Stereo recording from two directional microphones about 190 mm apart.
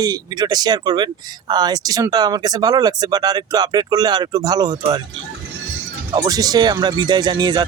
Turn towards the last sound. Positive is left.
turn(degrees=-20)  # may be behind; listen again after turning